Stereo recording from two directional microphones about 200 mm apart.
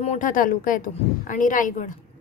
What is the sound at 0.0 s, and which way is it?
A woman's voice, 35° left (ahead or behind).